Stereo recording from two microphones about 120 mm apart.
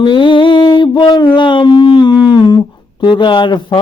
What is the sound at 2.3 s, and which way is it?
Speech, 40° left (ahead or behind).